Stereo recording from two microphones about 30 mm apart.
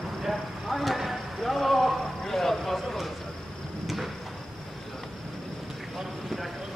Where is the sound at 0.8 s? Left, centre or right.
Centre.